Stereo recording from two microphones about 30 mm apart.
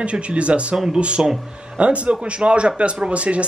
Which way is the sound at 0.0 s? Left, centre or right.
Right.